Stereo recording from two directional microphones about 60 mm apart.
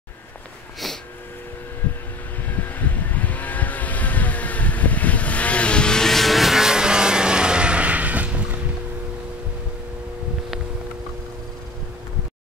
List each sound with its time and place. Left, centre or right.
2.8 s vehicle: left; by 8.5 s right